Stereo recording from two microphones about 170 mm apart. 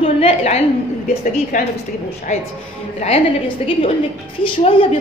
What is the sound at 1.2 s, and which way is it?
Speech, 50° left (ahead or behind).